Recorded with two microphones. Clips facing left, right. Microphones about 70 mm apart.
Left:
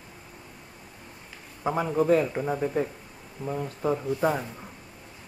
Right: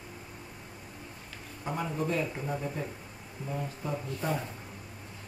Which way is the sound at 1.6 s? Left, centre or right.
Left.